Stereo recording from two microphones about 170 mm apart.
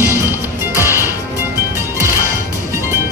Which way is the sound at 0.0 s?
15° right (ahead or behind).